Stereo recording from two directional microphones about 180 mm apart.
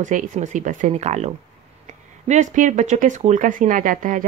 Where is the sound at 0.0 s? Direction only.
45° right (ahead or behind).